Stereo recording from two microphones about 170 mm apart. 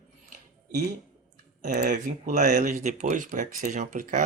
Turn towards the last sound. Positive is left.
turn(degrees=-45)  # may be behind; listen again after turning